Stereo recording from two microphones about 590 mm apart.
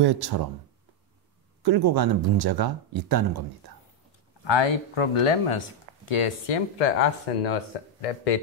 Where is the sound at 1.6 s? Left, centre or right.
Right.